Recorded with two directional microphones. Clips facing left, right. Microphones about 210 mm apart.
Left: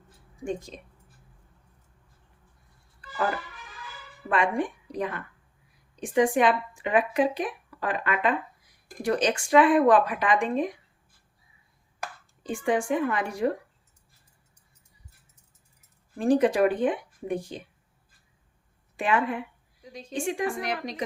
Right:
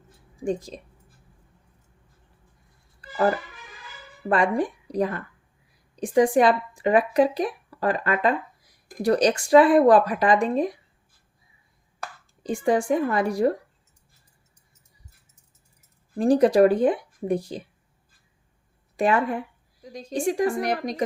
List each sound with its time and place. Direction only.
0.4 s speech: 35° right (ahead or behind)
3.0 s music: 40° right (ahead or behind)
4.3 s speech: 35° right (ahead or behind)
12.4 s speech: 40° right (ahead or behind)
16.1 s speech: 35° right (ahead or behind)
18.9 s speech: 40° right (ahead or behind)